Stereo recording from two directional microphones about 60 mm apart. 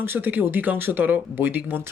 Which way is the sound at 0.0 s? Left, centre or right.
Right.